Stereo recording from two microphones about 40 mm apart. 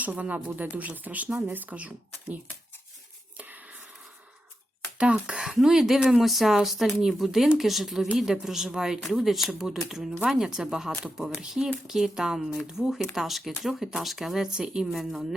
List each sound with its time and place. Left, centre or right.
0.0 s speech: right
4.9 s speech: right
5.5 s a woman's voice: centre
14.8 s a woman's voice: centre